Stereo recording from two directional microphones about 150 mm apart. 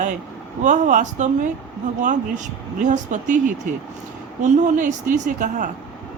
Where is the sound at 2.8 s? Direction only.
55° right (ahead or behind).